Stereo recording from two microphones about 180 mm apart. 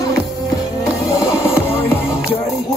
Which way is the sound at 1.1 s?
15° left (ahead or behind).